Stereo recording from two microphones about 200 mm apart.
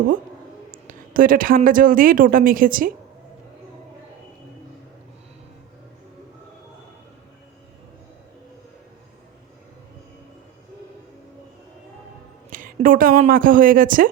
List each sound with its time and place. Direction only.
0.7 s speech: 45° right (ahead or behind)
12.5 s speech: 45° right (ahead or behind)